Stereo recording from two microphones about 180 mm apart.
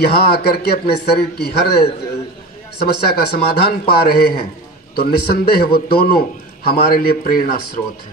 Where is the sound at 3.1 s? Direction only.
60° left (ahead or behind).